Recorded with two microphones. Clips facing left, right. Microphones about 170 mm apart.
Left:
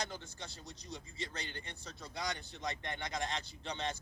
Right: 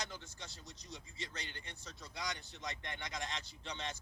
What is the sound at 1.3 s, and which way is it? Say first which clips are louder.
A man's voice: left 4 dB; 35° left (ahead or behind).